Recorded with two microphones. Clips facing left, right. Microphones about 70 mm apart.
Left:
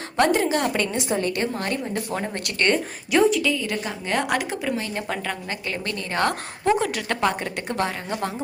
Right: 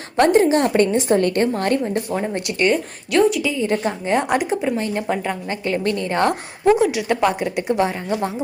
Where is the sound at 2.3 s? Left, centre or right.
Centre.